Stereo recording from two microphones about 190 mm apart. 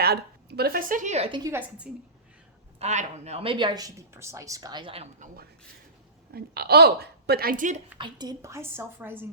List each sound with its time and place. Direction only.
0.0 s a woman's voice: 55° right (ahead or behind); by 1.4 s 35° right (ahead or behind)
1.5 s speech: 10° right (ahead or behind)
2.7 s speech: 35° right (ahead or behind)
6.3 s a woman's voice: 55° right (ahead or behind)
7.9 s speech: 25° right (ahead or behind)